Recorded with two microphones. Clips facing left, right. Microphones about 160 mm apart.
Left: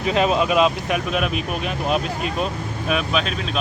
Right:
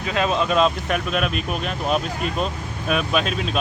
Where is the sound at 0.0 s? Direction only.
20° left (ahead or behind).